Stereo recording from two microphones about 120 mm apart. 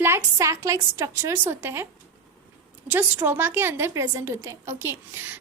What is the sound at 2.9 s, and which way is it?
A woman's voice, 15° right (ahead or behind).